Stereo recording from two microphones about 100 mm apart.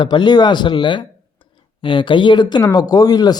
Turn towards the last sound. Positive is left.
turn(degrees=40)  # may be behind; listen again after turning